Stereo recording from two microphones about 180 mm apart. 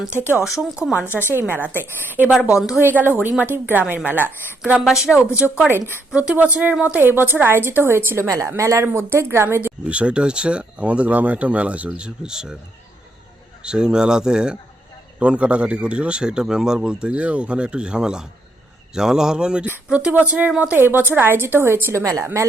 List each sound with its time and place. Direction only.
0.5 s a man's voice: centre (ahead or behind)
1.2 s speech: 15° left (ahead or behind)
1.5 s a woman's voice: 10° right (ahead or behind)
5.1 s speech: 15° left (ahead or behind)
5.5 s a woman's voice: 10° right (ahead or behind)
13.6 s a man's voice: 5° right (ahead or behind)